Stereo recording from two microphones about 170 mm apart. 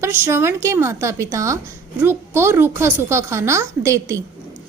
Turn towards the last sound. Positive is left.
turn(degrees=-15)  # may be behind; listen again after turning